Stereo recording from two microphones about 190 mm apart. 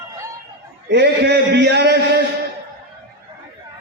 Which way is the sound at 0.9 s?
65° right (ahead or behind).